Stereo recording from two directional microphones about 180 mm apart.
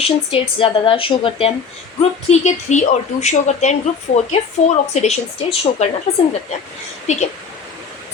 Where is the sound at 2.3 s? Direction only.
40° left (ahead or behind).